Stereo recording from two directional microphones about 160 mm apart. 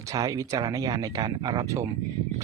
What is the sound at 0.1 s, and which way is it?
Speech, 20° right (ahead or behind).